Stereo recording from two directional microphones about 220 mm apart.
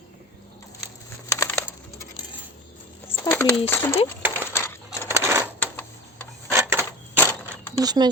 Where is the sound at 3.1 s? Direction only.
10° left (ahead or behind).